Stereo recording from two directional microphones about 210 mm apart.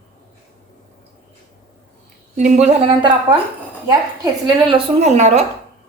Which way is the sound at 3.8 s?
20° right (ahead or behind).